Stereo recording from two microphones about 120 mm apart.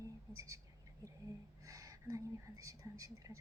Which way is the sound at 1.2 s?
25° right (ahead or behind).